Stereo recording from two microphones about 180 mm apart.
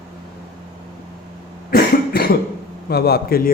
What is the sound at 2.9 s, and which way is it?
Speech, 60° left (ahead or behind).